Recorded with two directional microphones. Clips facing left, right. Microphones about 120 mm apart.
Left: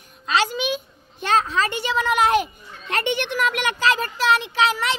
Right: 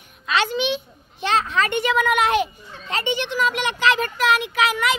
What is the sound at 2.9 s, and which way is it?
Speech, 60° left (ahead or behind).